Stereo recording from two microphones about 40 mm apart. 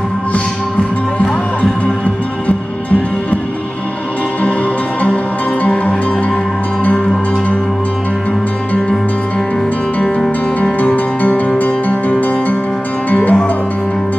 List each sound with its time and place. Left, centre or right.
2.4 s music: left
5.0 s music: left
11.2 s music: left